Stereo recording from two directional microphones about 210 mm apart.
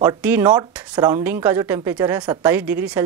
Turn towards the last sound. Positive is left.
turn(degrees=-10)  # may be behind; listen again after turning